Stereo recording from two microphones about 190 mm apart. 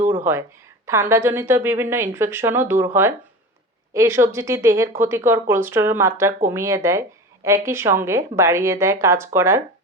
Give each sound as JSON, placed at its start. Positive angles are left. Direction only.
{"t": 0.9, "sound": "a woman's voice", "side_deg": -15}